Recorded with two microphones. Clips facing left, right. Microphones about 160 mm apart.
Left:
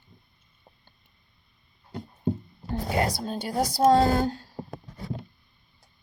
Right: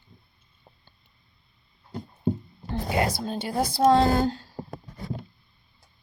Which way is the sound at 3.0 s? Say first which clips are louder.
Right 2 dB; 40° left (ahead or behind).